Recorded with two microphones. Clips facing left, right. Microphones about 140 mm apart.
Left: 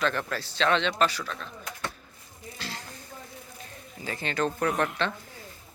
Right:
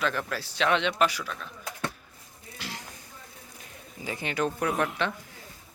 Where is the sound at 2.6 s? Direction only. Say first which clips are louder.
Even; 15° right (ahead or behind).